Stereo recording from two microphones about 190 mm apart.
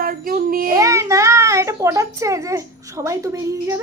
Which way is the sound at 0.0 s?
50° right (ahead or behind).